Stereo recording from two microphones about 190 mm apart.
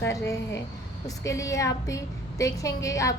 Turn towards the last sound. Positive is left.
turn(degrees=15)  # may be behind; listen again after turning